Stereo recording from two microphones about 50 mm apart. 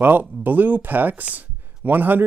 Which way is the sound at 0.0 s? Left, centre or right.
Right.